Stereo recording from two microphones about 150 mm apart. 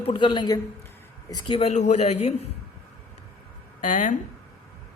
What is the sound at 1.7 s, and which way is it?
Speech, 50° left (ahead or behind).